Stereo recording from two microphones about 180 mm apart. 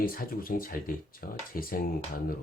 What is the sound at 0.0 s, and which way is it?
Speech, 55° left (ahead or behind).